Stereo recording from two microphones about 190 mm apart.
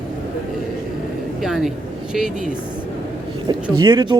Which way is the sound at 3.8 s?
25° right (ahead or behind).